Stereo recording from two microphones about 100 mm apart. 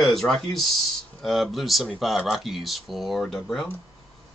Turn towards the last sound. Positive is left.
turn(degrees=5)  # may be behind; listen again after turning